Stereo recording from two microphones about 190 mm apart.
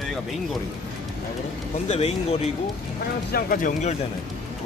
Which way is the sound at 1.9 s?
35° left (ahead or behind).